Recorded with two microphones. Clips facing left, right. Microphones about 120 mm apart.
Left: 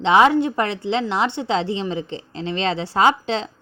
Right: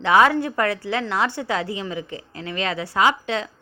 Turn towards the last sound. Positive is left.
turn(degrees=30)  # may be behind; listen again after turning